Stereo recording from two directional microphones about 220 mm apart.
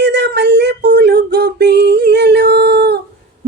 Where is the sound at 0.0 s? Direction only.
50° right (ahead or behind).